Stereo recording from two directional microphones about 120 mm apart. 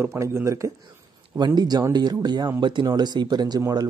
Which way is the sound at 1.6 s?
35° right (ahead or behind).